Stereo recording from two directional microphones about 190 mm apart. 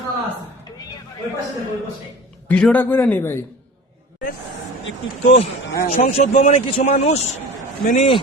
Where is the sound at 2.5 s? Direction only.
5° left (ahead or behind).